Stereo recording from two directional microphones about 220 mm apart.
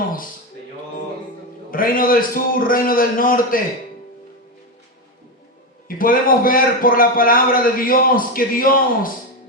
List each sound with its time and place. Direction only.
1.7 s a man's voice: 40° left (ahead or behind)
6.0 s a man's voice: 40° left (ahead or behind)